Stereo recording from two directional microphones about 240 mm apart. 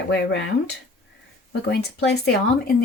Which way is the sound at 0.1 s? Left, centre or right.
Left.